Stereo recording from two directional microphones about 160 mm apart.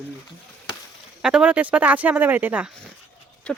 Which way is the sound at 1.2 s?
5° right (ahead or behind).